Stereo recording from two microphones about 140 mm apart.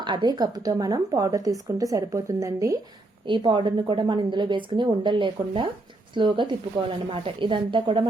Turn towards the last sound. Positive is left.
turn(degrees=-35)  # may be behind; listen again after turning